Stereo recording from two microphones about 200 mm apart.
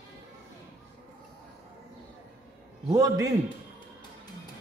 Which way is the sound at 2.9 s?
15° right (ahead or behind).